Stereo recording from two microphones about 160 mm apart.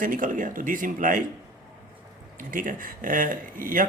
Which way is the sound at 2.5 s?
60° right (ahead or behind).